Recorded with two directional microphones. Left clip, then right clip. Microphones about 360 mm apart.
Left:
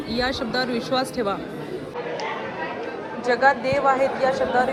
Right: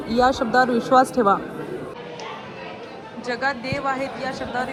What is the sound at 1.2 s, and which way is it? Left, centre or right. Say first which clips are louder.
Speech: right 7 dB; right.